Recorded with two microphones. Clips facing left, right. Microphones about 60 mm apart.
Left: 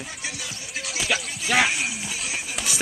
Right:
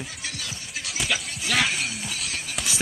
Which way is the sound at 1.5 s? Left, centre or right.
Centre.